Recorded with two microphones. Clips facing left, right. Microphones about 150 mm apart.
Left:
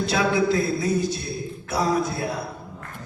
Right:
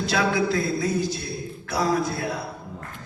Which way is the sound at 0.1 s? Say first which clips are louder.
Left 1 dB; 25° left (ahead or behind).